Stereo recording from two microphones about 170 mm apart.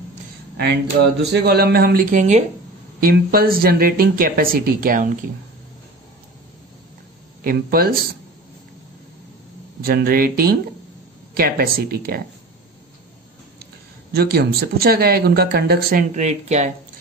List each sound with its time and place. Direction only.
1.3 s speech: 70° right (ahead or behind); by 2.4 s 45° right (ahead or behind)
3.0 s speech: 60° right (ahead or behind)
7.4 s speech: 60° right (ahead or behind)
9.8 s speech: 60° right (ahead or behind)
14.1 s speech: 65° right (ahead or behind)
16.2 s speech: 45° right (ahead or behind)